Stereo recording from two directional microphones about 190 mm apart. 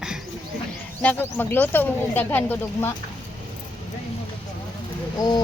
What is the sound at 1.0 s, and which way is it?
Speech, 10° left (ahead or behind).